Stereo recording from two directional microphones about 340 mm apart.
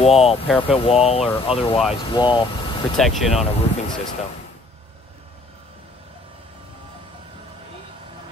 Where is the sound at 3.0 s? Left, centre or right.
Centre.